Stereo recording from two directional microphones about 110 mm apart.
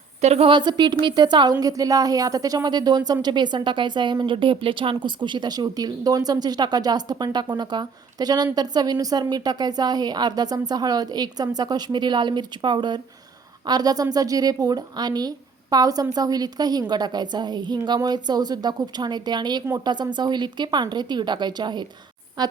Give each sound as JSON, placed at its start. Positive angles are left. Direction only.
{"t": 0.2, "sound": "a woman's voice", "side_deg": -80}
{"t": 0.4, "sound": "a woman's voice", "side_deg": -45}